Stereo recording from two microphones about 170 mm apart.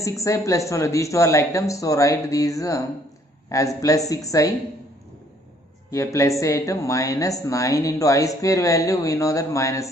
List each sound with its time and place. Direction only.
0.0 s speech: 20° left (ahead or behind)
5.9 s speech: 20° left (ahead or behind)